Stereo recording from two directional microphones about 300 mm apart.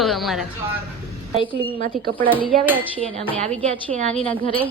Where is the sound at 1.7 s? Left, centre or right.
Right.